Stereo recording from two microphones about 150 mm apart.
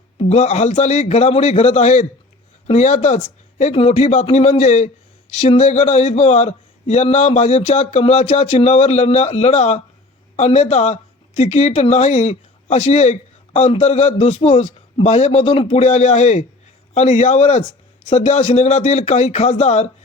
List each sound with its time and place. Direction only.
0.2 s speech: 45° left (ahead or behind)